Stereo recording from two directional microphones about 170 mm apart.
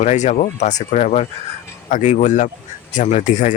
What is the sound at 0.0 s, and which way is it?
Speech, 45° left (ahead or behind).